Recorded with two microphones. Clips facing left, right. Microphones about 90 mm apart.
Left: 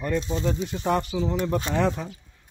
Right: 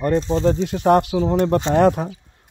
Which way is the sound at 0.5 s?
65° right (ahead or behind).